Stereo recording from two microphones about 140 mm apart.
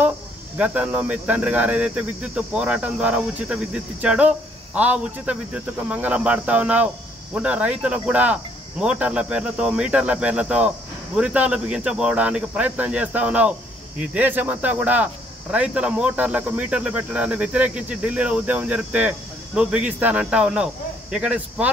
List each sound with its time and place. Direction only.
0.6 s speech: 10° right (ahead or behind)